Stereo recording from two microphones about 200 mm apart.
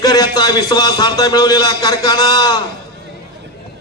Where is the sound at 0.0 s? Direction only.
20° left (ahead or behind).